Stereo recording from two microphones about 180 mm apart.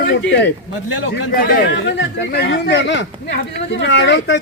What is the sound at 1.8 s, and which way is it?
A man's voice, 90° left.